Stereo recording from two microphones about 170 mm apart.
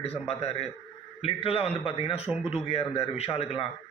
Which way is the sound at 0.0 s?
35° left (ahead or behind).